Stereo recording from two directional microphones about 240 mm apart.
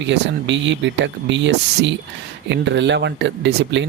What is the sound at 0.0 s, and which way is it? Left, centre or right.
Speech, right.